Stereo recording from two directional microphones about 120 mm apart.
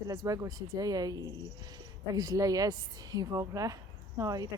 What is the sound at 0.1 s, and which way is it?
Speech, 30° right (ahead or behind).